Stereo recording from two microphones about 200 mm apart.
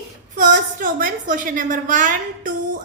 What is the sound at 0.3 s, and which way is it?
A woman's voice, 40° right (ahead or behind).